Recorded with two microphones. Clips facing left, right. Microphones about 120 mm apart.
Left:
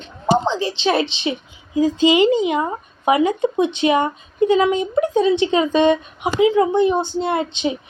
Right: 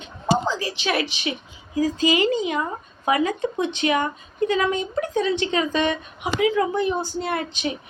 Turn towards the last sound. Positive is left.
turn(degrees=20)  # may be behind; listen again after turning